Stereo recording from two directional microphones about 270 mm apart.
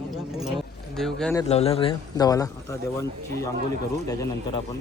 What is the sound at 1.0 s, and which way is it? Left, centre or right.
Speech, centre.